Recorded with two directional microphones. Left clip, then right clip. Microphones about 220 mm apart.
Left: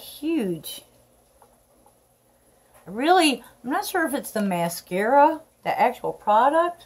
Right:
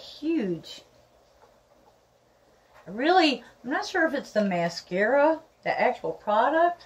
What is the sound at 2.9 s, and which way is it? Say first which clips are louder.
Speech: left 3 dB; 15° left (ahead or behind).